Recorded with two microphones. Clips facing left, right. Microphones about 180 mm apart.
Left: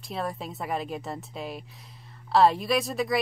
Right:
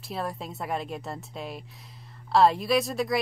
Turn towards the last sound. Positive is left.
turn(degrees=0)  # may be behind; listen again after turning